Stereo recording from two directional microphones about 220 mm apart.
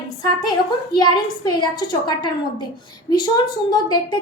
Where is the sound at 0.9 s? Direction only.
15° left (ahead or behind).